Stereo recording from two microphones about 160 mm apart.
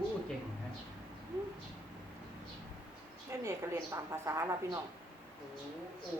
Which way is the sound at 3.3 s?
15° right (ahead or behind).